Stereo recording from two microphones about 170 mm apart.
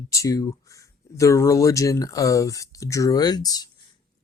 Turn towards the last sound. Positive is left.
turn(degrees=20)  # may be behind; listen again after turning